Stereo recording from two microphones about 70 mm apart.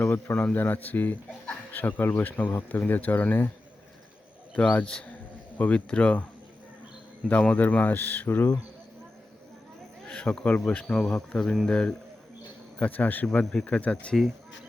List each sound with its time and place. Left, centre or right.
0.0 s speech: left
4.5 s a man's voice: left
7.3 s speech: left
10.1 s a man's voice: centre
12.8 s speech: left
13.4 s a man's voice: centre